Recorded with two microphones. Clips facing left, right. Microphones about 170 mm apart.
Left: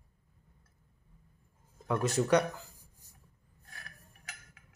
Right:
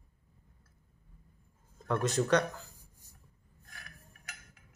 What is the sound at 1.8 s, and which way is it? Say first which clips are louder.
Speech: left 1 dB; 5° left (ahead or behind).